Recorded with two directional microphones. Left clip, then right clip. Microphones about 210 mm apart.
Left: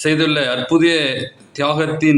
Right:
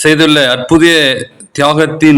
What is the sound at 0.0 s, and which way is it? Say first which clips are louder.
A man's voice: right 9 dB; 35° right (ahead or behind).